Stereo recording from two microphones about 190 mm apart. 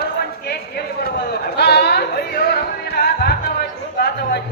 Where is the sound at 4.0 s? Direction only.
55° left (ahead or behind).